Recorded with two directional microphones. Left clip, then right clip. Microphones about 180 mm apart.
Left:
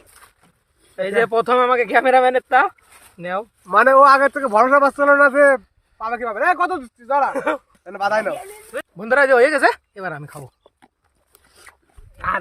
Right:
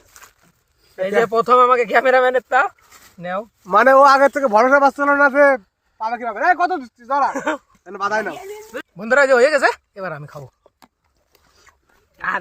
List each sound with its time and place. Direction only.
0.1 s a sound: 40° right (ahead or behind)
0.9 s speech: 20° left (ahead or behind)
2.5 s speech: 30° left (ahead or behind)
3.7 s speech: 50° right (ahead or behind)
4.7 s speech: 5° right (ahead or behind)
7.3 s speech: 20° left (ahead or behind)
8.3 s a sound: 45° left (ahead or behind)
9.0 s speech: 5° left (ahead or behind)